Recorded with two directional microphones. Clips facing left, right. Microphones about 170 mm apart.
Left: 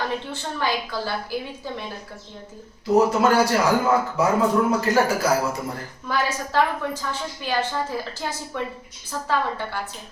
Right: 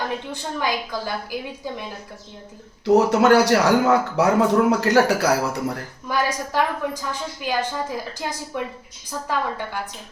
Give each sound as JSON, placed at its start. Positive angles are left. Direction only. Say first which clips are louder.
{"t": 0.3, "sound": "a woman's voice", "louder": "right 1 dB", "side_deg": -15}
{"t": 2.8, "sound": "speech", "louder": "right 2 dB", "side_deg": -70}
{"t": 6.1, "sound": "a woman's voice", "louder": "right 1 dB", "side_deg": -15}